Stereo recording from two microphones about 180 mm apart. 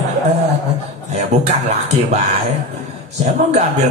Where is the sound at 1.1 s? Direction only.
40° right (ahead or behind).